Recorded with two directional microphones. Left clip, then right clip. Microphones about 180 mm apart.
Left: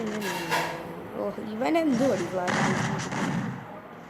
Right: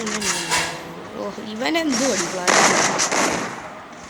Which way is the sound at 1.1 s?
Centre (ahead or behind).